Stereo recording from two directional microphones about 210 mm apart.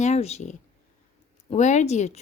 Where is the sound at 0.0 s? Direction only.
30° left (ahead or behind).